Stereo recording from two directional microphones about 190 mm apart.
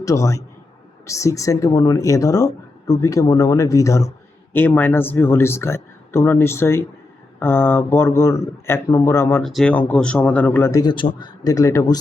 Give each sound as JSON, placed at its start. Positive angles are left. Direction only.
{"t": 0.0, "sound": "speech", "side_deg": 15}
{"t": 9.4, "sound": "speech", "side_deg": 0}